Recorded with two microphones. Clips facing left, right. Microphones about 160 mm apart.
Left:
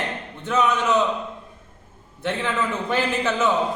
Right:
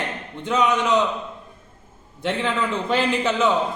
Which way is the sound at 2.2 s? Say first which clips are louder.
Right 1 dB; 15° right (ahead or behind).